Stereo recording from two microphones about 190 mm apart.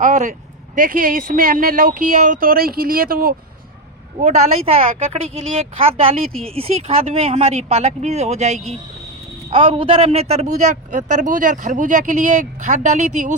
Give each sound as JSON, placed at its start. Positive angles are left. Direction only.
{"t": 0.0, "sound": "speech", "side_deg": -40}
{"t": 4.2, "sound": "a man's voice", "side_deg": -35}